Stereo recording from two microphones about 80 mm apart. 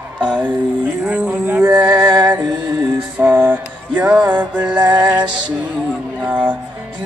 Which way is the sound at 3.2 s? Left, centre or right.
Right.